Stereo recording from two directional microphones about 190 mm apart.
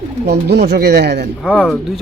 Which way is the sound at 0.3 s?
60° right (ahead or behind).